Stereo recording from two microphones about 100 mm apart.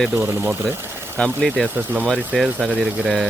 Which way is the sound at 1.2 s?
5° left (ahead or behind).